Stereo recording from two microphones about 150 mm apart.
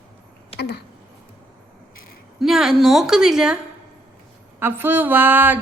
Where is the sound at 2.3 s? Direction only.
Centre (ahead or behind).